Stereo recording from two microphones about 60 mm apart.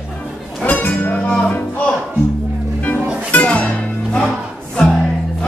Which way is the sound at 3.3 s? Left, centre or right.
Left.